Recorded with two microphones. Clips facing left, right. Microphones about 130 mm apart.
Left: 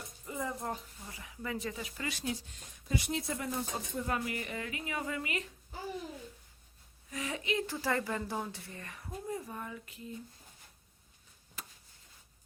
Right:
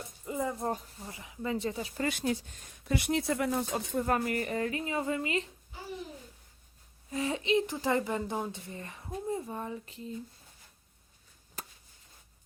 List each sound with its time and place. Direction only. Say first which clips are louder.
0.3 s a woman's voice: right 5 dB; 25° right (ahead or behind)
2.0 s speech: right 6 dB; 50° right (ahead or behind)
2.8 s speech: right 5 dB; 70° right (ahead or behind)
4.0 s a woman's voice: right 5 dB; 50° right (ahead or behind); by 5.4 s 25° right (ahead or behind)
7.1 s a woman's voice: right 7 dB; 30° right (ahead or behind)
11.6 s a sound: right 4 dB; 40° right (ahead or behind)